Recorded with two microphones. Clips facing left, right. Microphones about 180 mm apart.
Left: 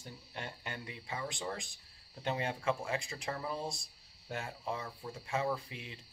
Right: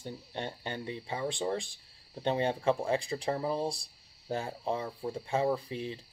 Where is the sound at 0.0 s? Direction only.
30° right (ahead or behind).